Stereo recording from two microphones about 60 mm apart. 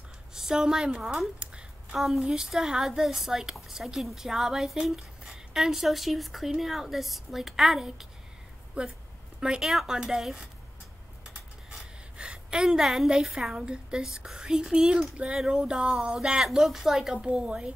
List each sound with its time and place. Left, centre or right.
0.3 s a woman's voice: centre
1.4 s a sound: centre
2.0 s a woman's voice: centre
8.8 s speech: centre
9.6 s a woman's voice: centre